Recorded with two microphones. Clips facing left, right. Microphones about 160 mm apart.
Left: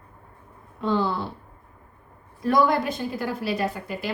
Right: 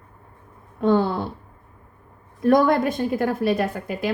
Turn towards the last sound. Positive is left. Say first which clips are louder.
# right 3 dB
turn(degrees=-50)  # may be behind; listen again after turning